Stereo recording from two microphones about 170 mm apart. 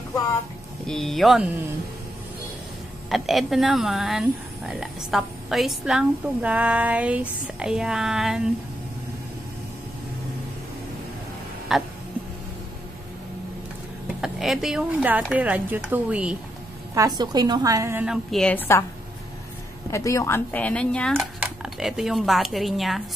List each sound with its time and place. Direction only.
0.8 s speech: centre (ahead or behind)
3.1 s speech: centre (ahead or behind)
11.7 s a sound: centre (ahead or behind)
14.2 s speech: centre (ahead or behind)
16.9 s a woman's voice: 20° right (ahead or behind)
18.0 s speech: centre (ahead or behind)
19.9 s speech: 20° left (ahead or behind); by 23.0 s centre (ahead or behind)